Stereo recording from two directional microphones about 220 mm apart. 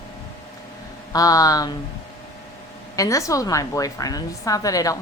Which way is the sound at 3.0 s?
15° left (ahead or behind).